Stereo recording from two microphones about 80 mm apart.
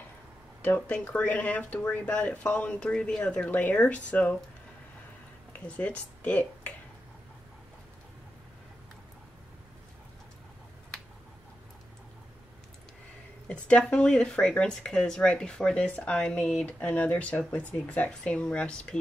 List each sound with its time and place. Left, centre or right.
0.6 s speech: centre
5.8 s speech: centre
13.5 s speech: centre